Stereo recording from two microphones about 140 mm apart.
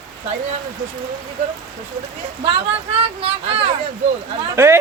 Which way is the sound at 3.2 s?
45° right (ahead or behind).